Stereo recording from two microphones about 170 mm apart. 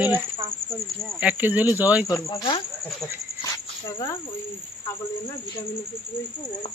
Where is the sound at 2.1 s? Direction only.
25° left (ahead or behind).